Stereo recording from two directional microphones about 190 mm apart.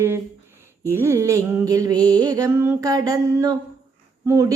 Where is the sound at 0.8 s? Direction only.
15° right (ahead or behind).